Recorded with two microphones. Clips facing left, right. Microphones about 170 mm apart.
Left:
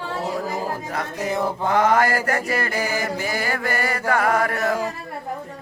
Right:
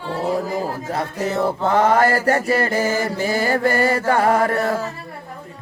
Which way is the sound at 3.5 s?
30° right (ahead or behind).